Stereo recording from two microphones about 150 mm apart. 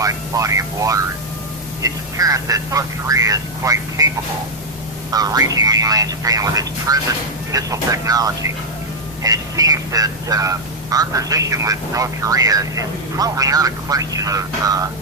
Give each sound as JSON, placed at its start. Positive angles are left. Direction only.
{"t": 0.0, "sound": "speech", "side_deg": -20}
{"t": 5.1, "sound": "speech", "side_deg": -25}